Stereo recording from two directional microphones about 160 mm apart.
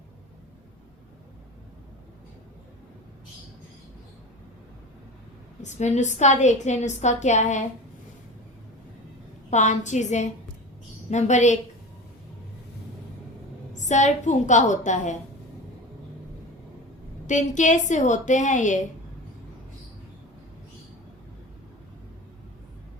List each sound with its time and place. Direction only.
5.6 s a woman's voice: 45° left (ahead or behind)
9.5 s a woman's voice: 50° left (ahead or behind)
13.8 s a woman's voice: 45° left (ahead or behind)
17.2 s a woman's voice: 50° left (ahead or behind)